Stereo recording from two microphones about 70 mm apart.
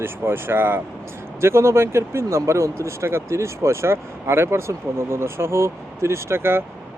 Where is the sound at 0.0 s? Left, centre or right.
Right.